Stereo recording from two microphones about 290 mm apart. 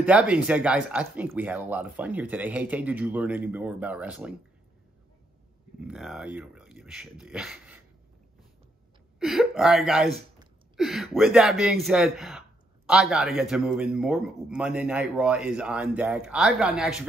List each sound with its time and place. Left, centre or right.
0.0 s speech: centre
5.9 s speech: centre
9.2 s speech: centre